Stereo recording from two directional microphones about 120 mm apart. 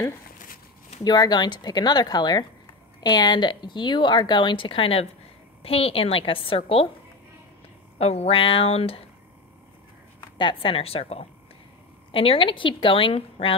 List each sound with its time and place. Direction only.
1.0 s a woman's voice: 35° left (ahead or behind); by 6.9 s 50° left (ahead or behind)
8.0 s speech: 60° left (ahead or behind)
10.3 s a woman's voice: 45° left (ahead or behind)